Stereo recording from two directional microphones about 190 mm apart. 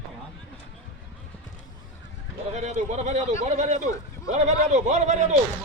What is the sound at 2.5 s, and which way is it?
A man's voice, 40° right (ahead or behind).